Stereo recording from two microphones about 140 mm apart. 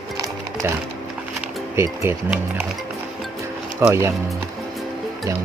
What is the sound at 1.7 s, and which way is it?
Speech, 20° right (ahead or behind).